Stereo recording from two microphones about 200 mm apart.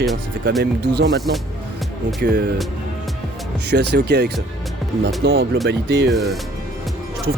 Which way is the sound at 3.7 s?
55° right (ahead or behind).